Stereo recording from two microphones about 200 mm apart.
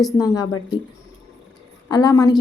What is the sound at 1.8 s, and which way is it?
Speech, 20° left (ahead or behind).